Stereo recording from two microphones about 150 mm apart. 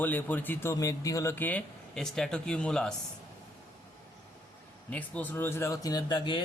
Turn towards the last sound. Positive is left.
turn(degrees=30)  # may be behind; listen again after turning